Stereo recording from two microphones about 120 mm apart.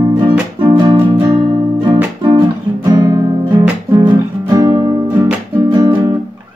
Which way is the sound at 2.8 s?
35° right (ahead or behind).